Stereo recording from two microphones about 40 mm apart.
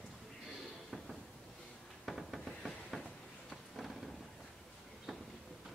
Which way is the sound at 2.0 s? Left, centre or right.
Centre.